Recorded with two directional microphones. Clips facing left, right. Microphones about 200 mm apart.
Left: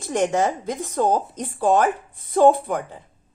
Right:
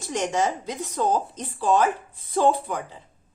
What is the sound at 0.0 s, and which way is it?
A woman's voice, 55° left (ahead or behind).